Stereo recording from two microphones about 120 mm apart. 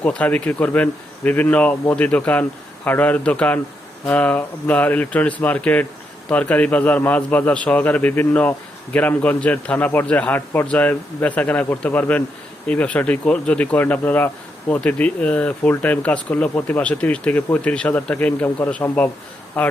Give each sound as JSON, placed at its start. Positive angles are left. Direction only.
{"t": 0.0, "sound": "speech", "side_deg": 10}